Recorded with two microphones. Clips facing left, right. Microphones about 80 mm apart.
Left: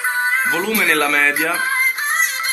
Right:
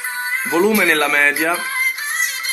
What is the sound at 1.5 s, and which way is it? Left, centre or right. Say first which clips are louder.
Music: left 3 dB; left.